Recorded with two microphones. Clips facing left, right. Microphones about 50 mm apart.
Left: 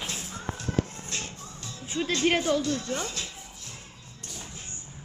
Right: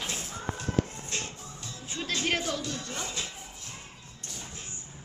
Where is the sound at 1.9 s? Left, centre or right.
Centre.